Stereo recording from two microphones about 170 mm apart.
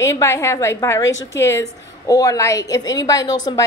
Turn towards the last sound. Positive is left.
turn(degrees=25)  # may be behind; listen again after turning